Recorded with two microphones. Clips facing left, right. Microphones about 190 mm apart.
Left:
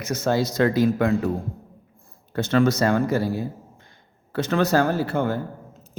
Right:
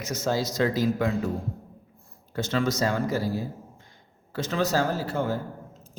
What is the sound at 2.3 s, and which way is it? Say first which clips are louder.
Speech: left 6 dB; 60° left (ahead or behind).